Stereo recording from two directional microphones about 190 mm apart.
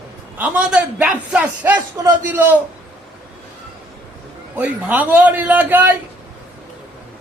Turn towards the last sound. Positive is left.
turn(degrees=-10)  # may be behind; listen again after turning